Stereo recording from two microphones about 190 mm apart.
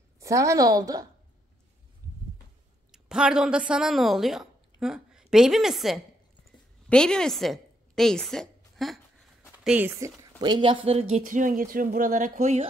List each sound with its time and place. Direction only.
0.2 s a woman's voice: 15° right (ahead or behind)
2.9 s a woman's voice: 5° right (ahead or behind)
9.7 s a woman's voice: 10° right (ahead or behind)
10.4 s speech: 25° right (ahead or behind)